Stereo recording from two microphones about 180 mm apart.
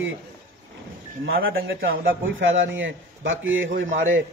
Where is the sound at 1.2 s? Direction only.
65° right (ahead or behind); by 3.6 s 90° right.